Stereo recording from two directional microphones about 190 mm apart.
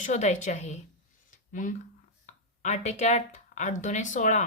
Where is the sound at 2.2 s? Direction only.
40° left (ahead or behind).